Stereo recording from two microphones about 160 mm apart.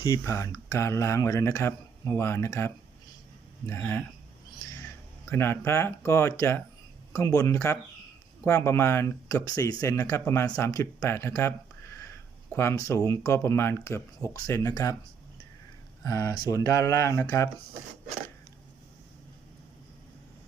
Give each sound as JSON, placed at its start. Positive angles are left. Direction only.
{"t": 0.0, "sound": "speech", "side_deg": 20}
{"t": 4.6, "sound": "a sound", "side_deg": 20}
{"t": 5.3, "sound": "speech", "side_deg": 15}
{"t": 16.0, "sound": "speech", "side_deg": 20}